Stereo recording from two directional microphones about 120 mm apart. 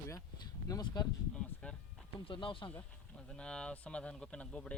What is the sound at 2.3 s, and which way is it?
Speech, 45° left (ahead or behind).